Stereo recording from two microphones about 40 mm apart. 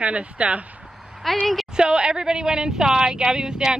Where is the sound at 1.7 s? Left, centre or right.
Right.